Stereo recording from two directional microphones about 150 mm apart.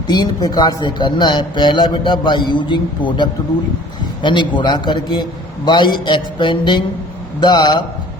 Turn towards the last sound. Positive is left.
turn(degrees=30)  # may be behind; listen again after turning